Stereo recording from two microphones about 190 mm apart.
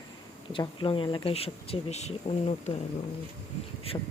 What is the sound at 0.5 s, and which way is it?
Speech, 25° left (ahead or behind).